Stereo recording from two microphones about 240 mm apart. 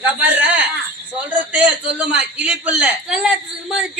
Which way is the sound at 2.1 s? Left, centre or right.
Centre.